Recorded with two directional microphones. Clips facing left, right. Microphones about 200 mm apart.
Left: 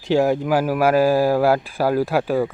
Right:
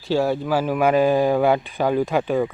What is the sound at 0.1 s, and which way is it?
Speech, 15° left (ahead or behind).